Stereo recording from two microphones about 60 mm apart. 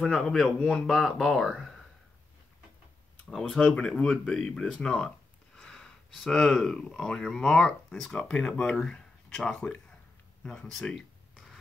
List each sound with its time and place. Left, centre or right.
0.0 s speech: centre
3.3 s speech: centre
10.7 s a sound: centre